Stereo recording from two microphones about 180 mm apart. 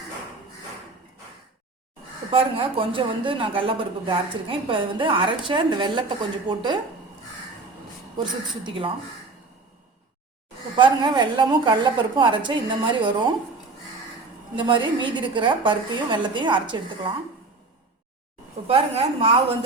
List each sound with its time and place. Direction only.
2.3 s a woman's voice: 30° right (ahead or behind)
8.2 s a woman's voice: 30° right (ahead or behind)
10.8 s a woman's voice: 25° right (ahead or behind)
14.5 s a woman's voice: 25° right (ahead or behind)
18.7 s a woman's voice: 30° right (ahead or behind)